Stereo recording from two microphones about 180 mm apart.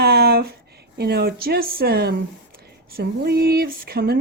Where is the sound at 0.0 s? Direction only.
60° right (ahead or behind).